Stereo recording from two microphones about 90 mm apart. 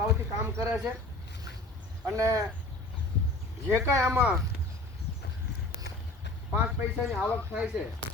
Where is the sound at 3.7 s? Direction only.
30° right (ahead or behind).